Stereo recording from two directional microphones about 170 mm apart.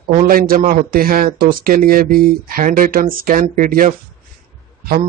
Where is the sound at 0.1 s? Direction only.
55° right (ahead or behind).